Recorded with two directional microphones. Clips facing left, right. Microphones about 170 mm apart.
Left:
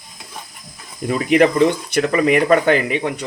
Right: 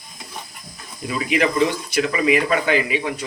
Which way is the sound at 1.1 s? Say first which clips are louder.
Left 6 dB; 45° left (ahead or behind).